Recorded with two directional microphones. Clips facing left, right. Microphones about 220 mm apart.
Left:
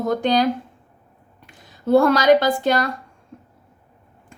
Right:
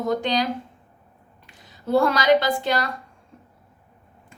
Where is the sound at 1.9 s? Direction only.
50° left (ahead or behind).